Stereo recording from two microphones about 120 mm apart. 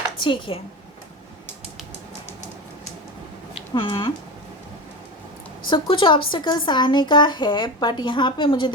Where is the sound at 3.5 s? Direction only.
45° left (ahead or behind).